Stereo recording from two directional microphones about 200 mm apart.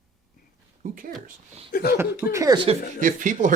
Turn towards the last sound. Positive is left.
turn(degrees=-40)  # may be behind; listen again after turning